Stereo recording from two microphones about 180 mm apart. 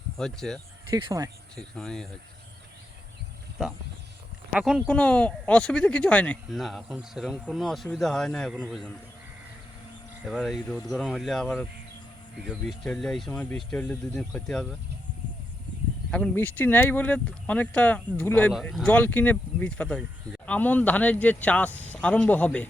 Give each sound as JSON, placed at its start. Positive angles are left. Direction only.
{"t": 0.2, "sound": "speech", "side_deg": 5}
{"t": 0.9, "sound": "speech", "side_deg": -20}
{"t": 1.5, "sound": "speech", "side_deg": 5}
{"t": 4.5, "sound": "speech", "side_deg": -5}
{"t": 10.2, "sound": "speech", "side_deg": 0}
{"t": 12.5, "sound": "speech", "side_deg": 5}
{"t": 16.1, "sound": "speech", "side_deg": 10}